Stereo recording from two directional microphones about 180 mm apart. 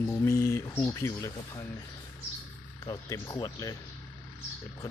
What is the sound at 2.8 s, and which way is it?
Speech, 20° left (ahead or behind).